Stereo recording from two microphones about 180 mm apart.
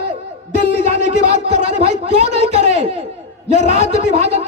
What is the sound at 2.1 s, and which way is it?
A man's voice, 35° right (ahead or behind).